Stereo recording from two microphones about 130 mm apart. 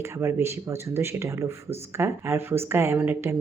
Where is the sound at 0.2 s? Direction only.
20° right (ahead or behind).